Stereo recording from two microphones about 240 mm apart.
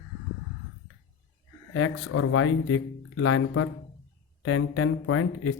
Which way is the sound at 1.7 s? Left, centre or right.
Left.